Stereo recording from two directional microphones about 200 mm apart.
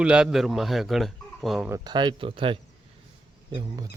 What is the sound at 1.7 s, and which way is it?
Speech, 20° right (ahead or behind).